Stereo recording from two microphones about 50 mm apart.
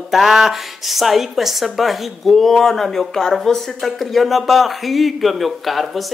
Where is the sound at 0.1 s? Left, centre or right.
Centre.